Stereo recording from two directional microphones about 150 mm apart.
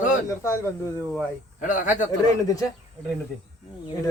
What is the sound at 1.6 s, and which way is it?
Speech, 55° left (ahead or behind).